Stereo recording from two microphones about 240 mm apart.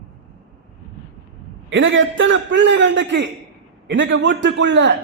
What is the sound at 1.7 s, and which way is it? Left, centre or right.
A man's voice, right.